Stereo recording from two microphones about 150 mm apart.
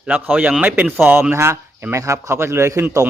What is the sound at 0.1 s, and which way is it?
A man's voice, 10° right (ahead or behind).